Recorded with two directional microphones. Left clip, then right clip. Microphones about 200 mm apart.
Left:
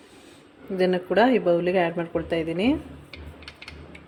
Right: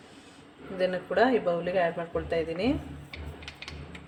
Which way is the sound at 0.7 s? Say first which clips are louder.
Left 5 dB; 35° left (ahead or behind).